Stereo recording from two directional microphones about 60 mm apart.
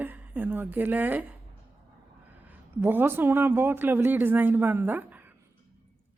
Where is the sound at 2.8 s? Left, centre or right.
Right.